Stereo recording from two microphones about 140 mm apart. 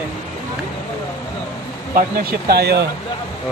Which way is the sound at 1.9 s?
90° right.